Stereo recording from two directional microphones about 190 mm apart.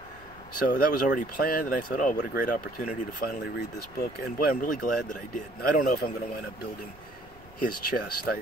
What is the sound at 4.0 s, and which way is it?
Speech, 50° left (ahead or behind).